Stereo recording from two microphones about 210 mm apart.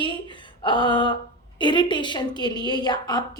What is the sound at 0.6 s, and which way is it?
A woman's voice, 20° left (ahead or behind).